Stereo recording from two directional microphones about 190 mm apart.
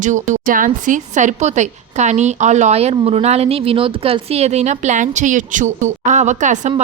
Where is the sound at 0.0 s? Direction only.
40° right (ahead or behind).